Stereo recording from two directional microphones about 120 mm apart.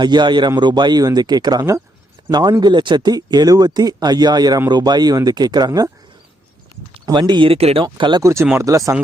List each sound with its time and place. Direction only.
0.0 s speech: 35° right (ahead or behind)
7.0 s speech: 40° right (ahead or behind); by 7.9 s 55° right (ahead or behind)
7.9 s speech: 40° right (ahead or behind)
8.2 s speech: 25° right (ahead or behind)